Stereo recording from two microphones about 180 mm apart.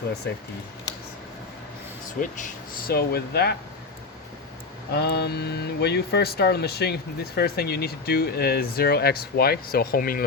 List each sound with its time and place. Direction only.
0.3 s speech: 65° left (ahead or behind)
2.2 s speech: 45° left (ahead or behind); by 3.5 s 65° left (ahead or behind)
4.9 s speech: 65° left (ahead or behind)